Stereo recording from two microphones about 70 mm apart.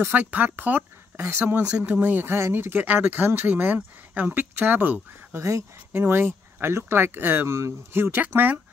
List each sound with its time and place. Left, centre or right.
0.0 s speech: right
2.3 s speech: right
5.3 s speech: right
5.9 s speech: right